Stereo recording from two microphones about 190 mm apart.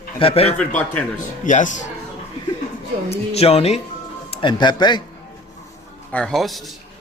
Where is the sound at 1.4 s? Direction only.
40° left (ahead or behind).